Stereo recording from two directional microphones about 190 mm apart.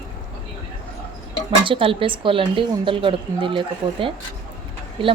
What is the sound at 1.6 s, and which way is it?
A woman's voice, 25° right (ahead or behind).